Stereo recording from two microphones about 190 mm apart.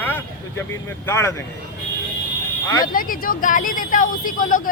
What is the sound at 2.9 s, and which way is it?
Speech, 50° left (ahead or behind).